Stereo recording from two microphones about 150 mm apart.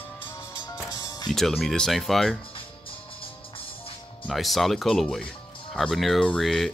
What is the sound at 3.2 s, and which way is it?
Music, 35° left (ahead or behind).